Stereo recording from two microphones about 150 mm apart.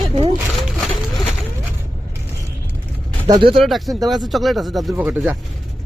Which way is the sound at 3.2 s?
30° right (ahead or behind).